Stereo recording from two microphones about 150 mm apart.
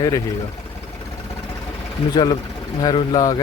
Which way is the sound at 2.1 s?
25° left (ahead or behind).